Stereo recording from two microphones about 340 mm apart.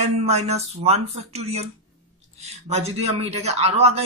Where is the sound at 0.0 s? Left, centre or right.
Centre.